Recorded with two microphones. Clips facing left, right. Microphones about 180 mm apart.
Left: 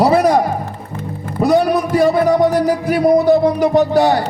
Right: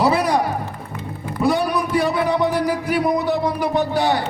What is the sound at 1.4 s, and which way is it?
A man's voice, 45° left (ahead or behind).